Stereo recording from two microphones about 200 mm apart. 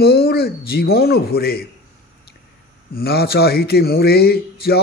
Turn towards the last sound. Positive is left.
turn(degrees=50)  # may be behind; listen again after turning